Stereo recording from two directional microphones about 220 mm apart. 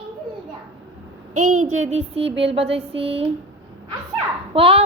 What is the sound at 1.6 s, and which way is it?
A woman's voice, 30° right (ahead or behind).